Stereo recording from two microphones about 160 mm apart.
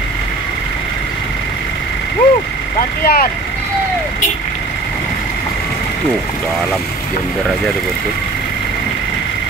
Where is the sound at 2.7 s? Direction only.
70° left (ahead or behind).